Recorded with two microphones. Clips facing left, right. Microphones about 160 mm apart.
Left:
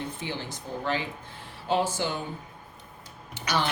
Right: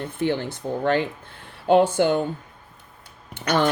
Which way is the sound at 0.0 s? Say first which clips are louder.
Right 10 dB; 55° right (ahead or behind).